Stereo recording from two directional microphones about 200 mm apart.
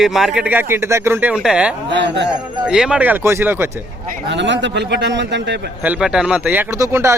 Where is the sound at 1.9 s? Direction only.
60° right (ahead or behind).